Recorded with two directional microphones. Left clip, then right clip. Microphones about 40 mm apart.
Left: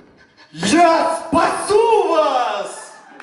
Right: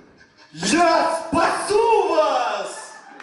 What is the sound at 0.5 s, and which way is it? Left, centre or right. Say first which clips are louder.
A man's voice: left 4 dB; left.